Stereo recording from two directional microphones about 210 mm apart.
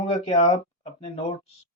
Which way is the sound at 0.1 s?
30° left (ahead or behind).